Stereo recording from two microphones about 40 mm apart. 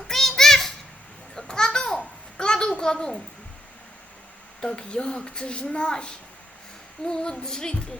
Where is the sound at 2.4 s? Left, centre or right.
Centre.